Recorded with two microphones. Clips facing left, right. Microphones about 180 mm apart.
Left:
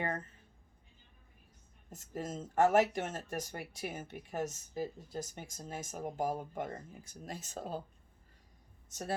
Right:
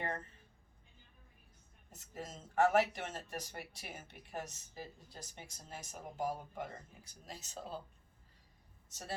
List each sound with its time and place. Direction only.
1.9 s speech: 45° left (ahead or behind)
8.9 s speech: 50° left (ahead or behind)